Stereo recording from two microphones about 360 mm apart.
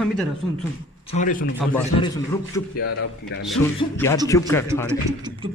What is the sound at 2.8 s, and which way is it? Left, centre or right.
Speech, left.